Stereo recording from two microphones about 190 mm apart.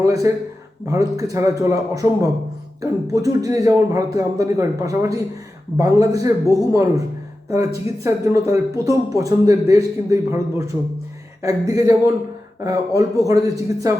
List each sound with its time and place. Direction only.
0.0 s speech: 15° right (ahead or behind)